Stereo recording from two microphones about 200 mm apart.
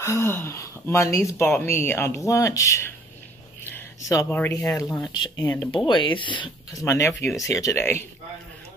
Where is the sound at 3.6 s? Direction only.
10° left (ahead or behind).